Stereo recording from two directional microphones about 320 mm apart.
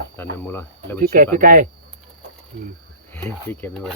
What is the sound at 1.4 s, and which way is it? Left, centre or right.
Speech, right.